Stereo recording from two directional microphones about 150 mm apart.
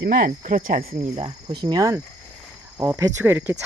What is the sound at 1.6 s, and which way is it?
Speech, 25° right (ahead or behind).